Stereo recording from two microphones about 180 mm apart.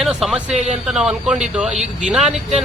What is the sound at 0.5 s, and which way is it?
Speech, 35° right (ahead or behind).